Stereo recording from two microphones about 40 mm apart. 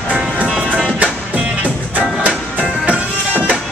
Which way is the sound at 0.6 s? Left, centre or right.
Right.